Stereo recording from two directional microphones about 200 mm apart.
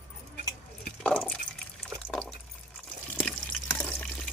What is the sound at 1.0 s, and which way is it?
Liquid, 5° left (ahead or behind).